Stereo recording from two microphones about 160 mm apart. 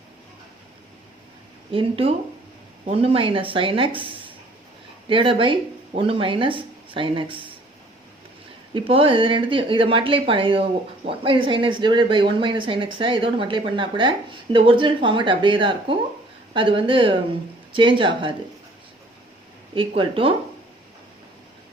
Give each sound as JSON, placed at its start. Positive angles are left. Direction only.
{"t": 1.7, "sound": "speech", "side_deg": -35}
{"t": 8.7, "sound": "speech", "side_deg": -35}
{"t": 20.0, "sound": "speech", "side_deg": -35}